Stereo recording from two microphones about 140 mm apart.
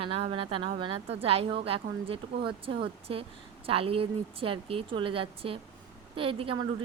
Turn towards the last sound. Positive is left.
turn(degrees=-40)  # may be behind; listen again after turning